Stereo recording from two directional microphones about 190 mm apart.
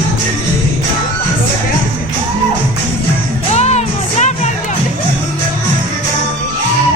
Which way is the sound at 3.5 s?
35° left (ahead or behind).